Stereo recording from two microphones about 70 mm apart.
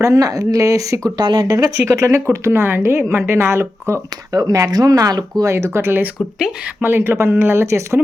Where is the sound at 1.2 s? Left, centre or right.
Right.